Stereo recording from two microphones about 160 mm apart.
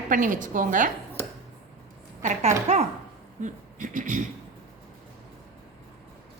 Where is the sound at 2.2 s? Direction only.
50° right (ahead or behind).